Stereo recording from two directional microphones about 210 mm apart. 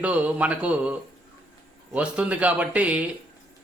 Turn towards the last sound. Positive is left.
turn(degrees=-5)  # may be behind; listen again after turning